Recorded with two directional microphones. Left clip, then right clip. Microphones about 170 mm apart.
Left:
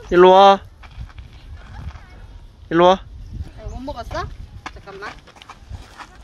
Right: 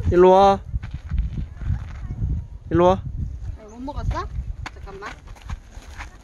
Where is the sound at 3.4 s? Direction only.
65° right (ahead or behind).